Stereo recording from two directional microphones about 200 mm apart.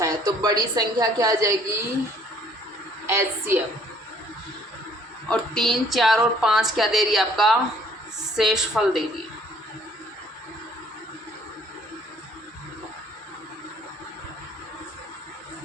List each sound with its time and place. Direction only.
0.0 s a woman's voice: 20° right (ahead or behind)
3.1 s a woman's voice: 10° right (ahead or behind)
5.3 s a woman's voice: centre (ahead or behind)